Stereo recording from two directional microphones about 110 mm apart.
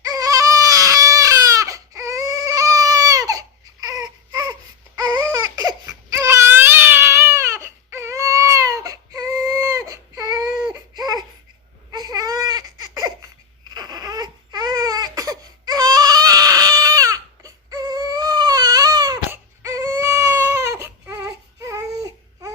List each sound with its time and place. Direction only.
0.0 s baby cry: 35° right (ahead or behind)